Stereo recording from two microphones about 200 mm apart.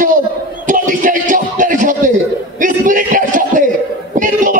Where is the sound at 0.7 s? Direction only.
40° right (ahead or behind).